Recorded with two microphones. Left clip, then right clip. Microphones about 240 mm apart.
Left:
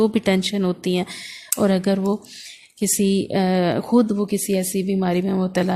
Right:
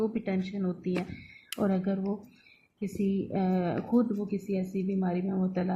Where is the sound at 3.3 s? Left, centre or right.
Left.